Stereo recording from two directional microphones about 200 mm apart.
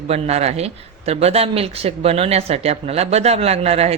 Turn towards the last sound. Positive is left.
turn(degrees=-30)  # may be behind; listen again after turning